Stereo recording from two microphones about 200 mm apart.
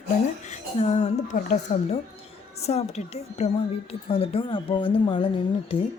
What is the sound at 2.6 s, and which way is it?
A woman's voice, 30° left (ahead or behind).